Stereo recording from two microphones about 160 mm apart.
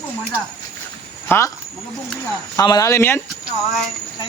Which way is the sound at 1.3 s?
15° left (ahead or behind).